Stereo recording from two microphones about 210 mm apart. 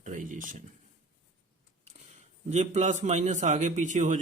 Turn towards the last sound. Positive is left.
turn(degrees=-35)  # may be behind; listen again after turning